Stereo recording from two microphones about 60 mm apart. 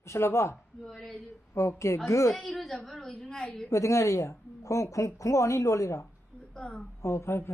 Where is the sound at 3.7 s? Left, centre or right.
Left.